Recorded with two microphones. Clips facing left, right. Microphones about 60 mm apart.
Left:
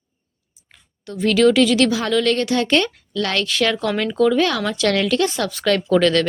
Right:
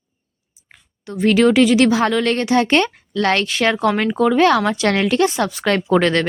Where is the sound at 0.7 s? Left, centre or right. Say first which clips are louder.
Right 2 dB; right.